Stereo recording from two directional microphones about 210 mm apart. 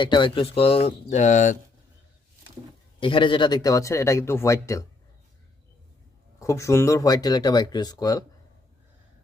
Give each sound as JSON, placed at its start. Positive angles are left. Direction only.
{"t": 0.0, "sound": "speech", "side_deg": 20}
{"t": 3.0, "sound": "speech", "side_deg": 25}
{"t": 6.4, "sound": "speech", "side_deg": 15}